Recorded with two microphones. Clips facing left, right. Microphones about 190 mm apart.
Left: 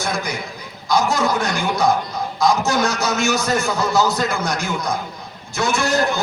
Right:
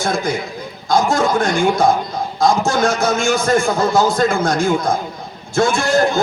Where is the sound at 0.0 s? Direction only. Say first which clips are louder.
Right 5 dB; 50° right (ahead or behind).